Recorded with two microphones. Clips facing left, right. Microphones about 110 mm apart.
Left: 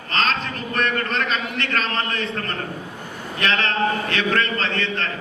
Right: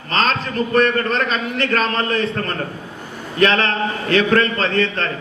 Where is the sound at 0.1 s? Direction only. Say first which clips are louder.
Right 4 dB; 40° right (ahead or behind).